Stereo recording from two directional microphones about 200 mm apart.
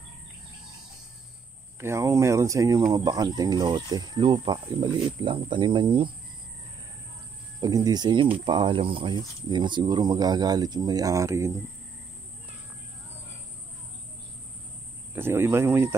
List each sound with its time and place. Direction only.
1.8 s speech: 15° right (ahead or behind)
7.6 s speech: 20° right (ahead or behind)
15.1 s speech: 10° right (ahead or behind)